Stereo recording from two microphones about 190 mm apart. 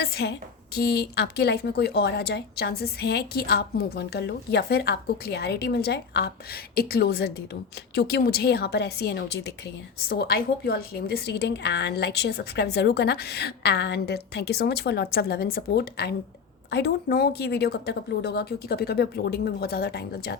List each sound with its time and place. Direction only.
0.0 s a woman's voice: 60° left (ahead or behind)